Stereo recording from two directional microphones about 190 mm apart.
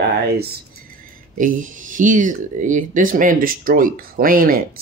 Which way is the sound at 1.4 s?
45° right (ahead or behind).